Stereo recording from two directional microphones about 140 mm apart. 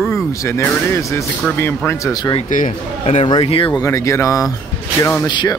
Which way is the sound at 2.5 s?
60° left (ahead or behind).